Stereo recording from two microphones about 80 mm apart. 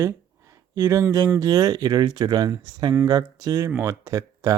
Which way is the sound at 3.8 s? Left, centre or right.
Right.